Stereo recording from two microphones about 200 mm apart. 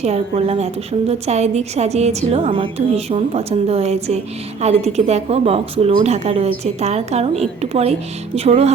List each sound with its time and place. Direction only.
0.0 s a woman's voice: 30° right (ahead or behind)